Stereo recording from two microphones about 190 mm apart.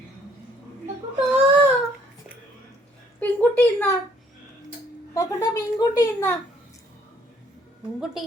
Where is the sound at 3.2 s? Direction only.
10° left (ahead or behind).